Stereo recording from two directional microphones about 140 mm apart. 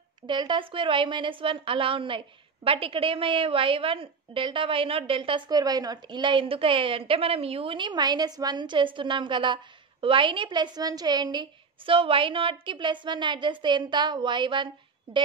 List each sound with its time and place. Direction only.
0.3 s a woman's voice: 35° right (ahead or behind)